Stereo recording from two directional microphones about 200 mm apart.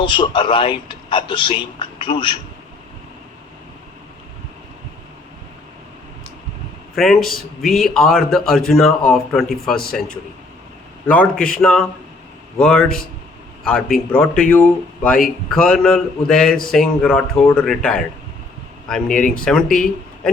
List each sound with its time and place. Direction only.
0.0 s a man's voice: 25° left (ahead or behind)
6.9 s a man's voice: centre (ahead or behind)
9.7 s a man's voice: 50° left (ahead or behind)
11.0 s a man's voice: 5° left (ahead or behind)
11.3 s a man's voice: 45° left (ahead or behind)
11.6 s a man's voice: 5° left (ahead or behind)
19.0 s speech: 40° left (ahead or behind)
19.5 s speech: 5° left (ahead or behind)